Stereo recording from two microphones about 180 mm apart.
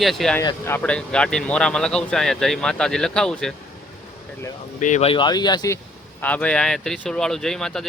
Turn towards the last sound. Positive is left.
turn(degrees=5)  # may be behind; listen again after turning